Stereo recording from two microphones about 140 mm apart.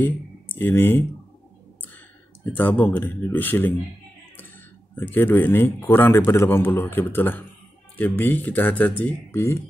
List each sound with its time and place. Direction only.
0.0 s speech: 15° left (ahead or behind)
2.5 s a man's voice: 15° left (ahead or behind)
4.9 s a man's voice: 15° left (ahead or behind)